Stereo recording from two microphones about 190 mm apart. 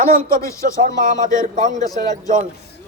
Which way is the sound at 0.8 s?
45° right (ahead or behind).